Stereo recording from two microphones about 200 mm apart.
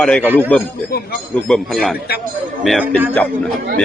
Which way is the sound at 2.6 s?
Centre (ahead or behind).